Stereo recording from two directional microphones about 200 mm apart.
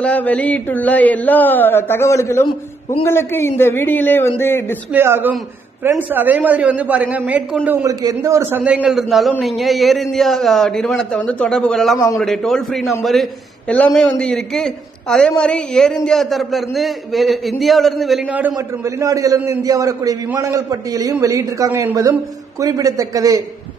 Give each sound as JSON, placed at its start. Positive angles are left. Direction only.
{"t": 0.0, "sound": "speech", "side_deg": 5}
{"t": 4.9, "sound": "a man's voice", "side_deg": -10}